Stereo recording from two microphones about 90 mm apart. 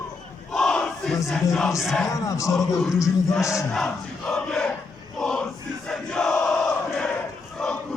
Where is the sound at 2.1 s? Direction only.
40° left (ahead or behind).